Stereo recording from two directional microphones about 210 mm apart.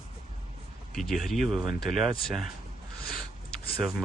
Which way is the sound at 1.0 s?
Centre (ahead or behind).